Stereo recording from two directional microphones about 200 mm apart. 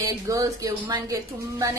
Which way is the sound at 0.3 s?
15° right (ahead or behind).